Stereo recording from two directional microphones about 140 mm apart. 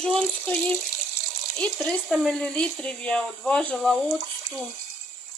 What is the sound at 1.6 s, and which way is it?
Speech, 5° left (ahead or behind).